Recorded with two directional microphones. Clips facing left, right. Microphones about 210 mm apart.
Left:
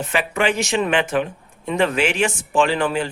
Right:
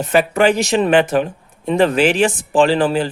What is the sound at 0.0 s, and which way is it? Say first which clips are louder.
Speech: right 7 dB; 40° right (ahead or behind).